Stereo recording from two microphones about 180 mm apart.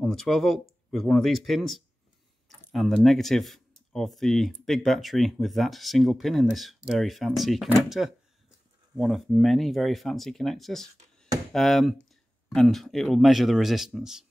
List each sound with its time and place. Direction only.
0.0 s speech: centre (ahead or behind)